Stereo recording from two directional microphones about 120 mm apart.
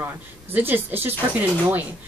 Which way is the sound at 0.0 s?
15° right (ahead or behind).